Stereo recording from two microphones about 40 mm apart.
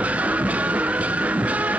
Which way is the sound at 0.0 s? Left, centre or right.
Right.